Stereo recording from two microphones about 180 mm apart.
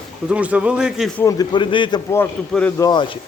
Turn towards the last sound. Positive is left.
turn(degrees=25)  # may be behind; listen again after turning